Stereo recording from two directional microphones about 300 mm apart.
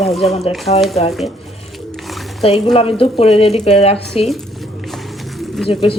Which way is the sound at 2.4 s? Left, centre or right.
Centre.